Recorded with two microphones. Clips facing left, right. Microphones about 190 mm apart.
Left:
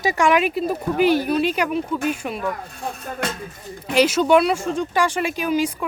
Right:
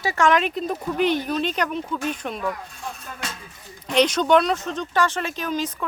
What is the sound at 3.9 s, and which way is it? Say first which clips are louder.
Speech: left 2 dB; 5° left (ahead or behind).